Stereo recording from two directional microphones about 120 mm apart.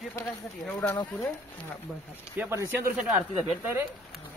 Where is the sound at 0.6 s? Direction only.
10° left (ahead or behind).